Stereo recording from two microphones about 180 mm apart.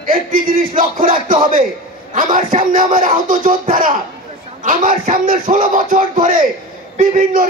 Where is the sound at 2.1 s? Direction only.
45° right (ahead or behind).